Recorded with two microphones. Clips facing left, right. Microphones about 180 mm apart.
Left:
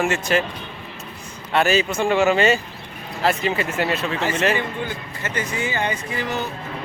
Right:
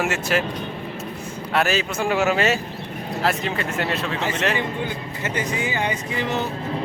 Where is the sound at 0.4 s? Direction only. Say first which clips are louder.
Right 5 dB; 45° right (ahead or behind).